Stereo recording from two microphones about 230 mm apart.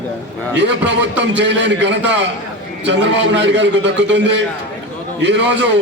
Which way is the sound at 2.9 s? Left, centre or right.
Right.